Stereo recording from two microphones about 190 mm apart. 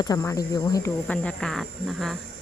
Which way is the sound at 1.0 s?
5° left (ahead or behind).